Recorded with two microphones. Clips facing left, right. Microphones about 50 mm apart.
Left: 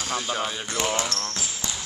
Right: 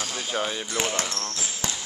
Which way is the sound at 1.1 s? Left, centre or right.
Centre.